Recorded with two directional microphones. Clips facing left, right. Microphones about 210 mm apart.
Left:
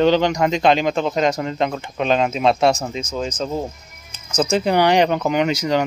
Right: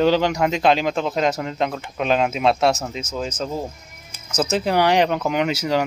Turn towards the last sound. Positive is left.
turn(degrees=-5)  # may be behind; listen again after turning